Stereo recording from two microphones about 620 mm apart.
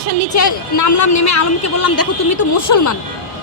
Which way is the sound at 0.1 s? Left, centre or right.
Left.